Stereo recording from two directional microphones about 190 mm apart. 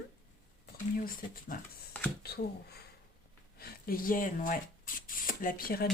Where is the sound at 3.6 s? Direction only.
50° left (ahead or behind).